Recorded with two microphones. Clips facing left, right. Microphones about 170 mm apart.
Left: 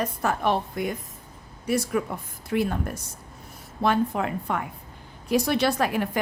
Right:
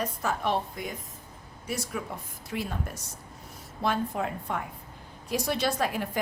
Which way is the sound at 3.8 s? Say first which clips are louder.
Left 5 dB; 70° left (ahead or behind).